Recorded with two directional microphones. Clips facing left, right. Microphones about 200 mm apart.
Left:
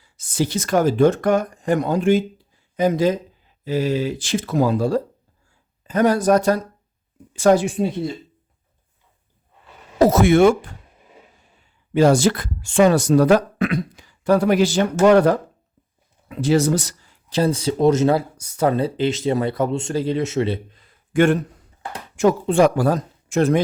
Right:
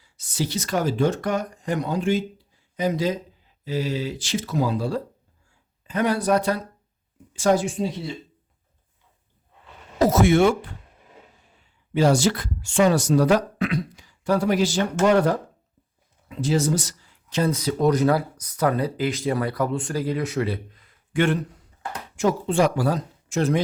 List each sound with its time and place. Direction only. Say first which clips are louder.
0.0 s speech: left 5 dB; 50° left (ahead or behind)
7.3 s speech: left 5 dB; 60° left (ahead or behind)
10.0 s speech: left 4 dB; 65° left (ahead or behind); by 10.8 s 50° left (ahead or behind)
11.9 s speech: left 4 dB; 50° left (ahead or behind)
17.1 s speech: left 4 dB; 35° left (ahead or behind)
21.1 s a man's voice: left 5 dB; 45° left (ahead or behind)
22.1 s speech: left 5 dB; 60° left (ahead or behind)